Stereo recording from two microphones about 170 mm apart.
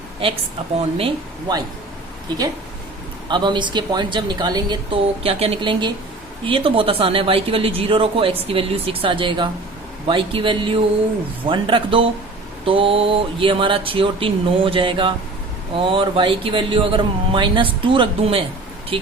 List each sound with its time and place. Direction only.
0.9 s speech: 35° right (ahead or behind)
3.2 s speech: 25° right (ahead or behind)